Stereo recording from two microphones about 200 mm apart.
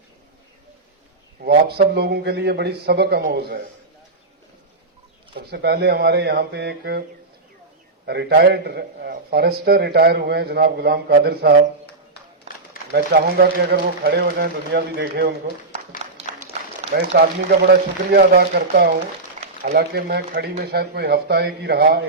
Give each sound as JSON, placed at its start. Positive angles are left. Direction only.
{"t": 1.5, "sound": "speech", "side_deg": -50}
{"t": 5.3, "sound": "speech", "side_deg": -55}
{"t": 8.0, "sound": "a man's voice", "side_deg": -55}
{"t": 12.9, "sound": "a man's voice", "side_deg": -45}
{"t": 16.9, "sound": "a man's voice", "side_deg": -50}